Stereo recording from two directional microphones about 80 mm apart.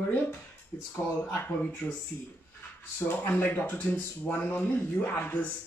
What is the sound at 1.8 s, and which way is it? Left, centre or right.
Speech, centre.